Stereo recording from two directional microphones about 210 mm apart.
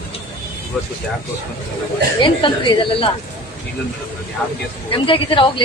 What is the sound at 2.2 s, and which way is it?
Speech, 25° left (ahead or behind).